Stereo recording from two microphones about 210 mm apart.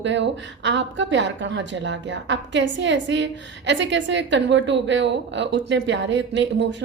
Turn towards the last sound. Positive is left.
turn(degrees=-60)  # may be behind; listen again after turning